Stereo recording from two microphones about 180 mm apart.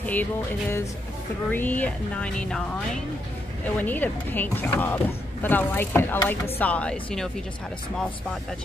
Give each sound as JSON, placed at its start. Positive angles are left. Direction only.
{"t": 0.0, "sound": "speech", "side_deg": 10}
{"t": 3.6, "sound": "speech", "side_deg": 10}